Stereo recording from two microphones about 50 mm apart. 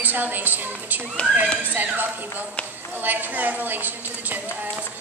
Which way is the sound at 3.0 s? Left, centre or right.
Right.